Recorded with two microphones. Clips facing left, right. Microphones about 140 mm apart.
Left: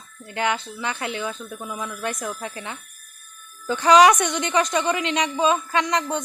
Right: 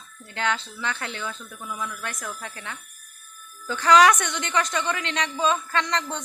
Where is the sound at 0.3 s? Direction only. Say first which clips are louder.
Left 3 dB; 15° left (ahead or behind).